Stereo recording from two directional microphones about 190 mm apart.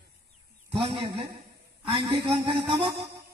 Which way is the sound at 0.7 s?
25° right (ahead or behind).